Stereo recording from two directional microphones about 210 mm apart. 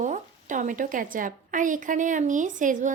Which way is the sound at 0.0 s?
35° right (ahead or behind).